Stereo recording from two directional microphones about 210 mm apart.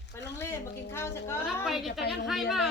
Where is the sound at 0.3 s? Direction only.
10° left (ahead or behind).